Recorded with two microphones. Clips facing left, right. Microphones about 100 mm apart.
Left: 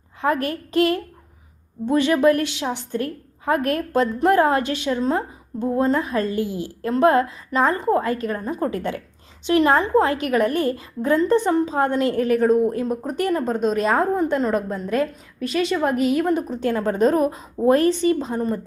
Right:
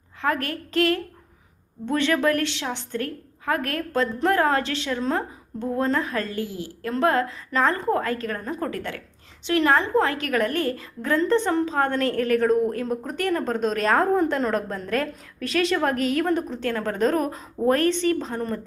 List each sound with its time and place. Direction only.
0.2 s a woman's voice: 20° left (ahead or behind)
13.4 s a woman's voice: 5° left (ahead or behind)